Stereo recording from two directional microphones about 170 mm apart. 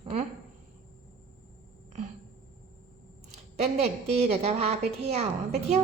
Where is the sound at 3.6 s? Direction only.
40° right (ahead or behind).